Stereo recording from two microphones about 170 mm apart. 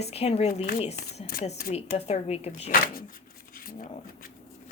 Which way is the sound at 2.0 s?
40° left (ahead or behind).